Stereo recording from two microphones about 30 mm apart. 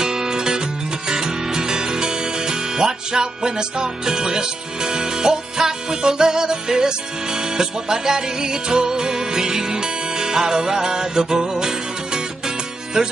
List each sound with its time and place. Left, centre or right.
0.0 s music: right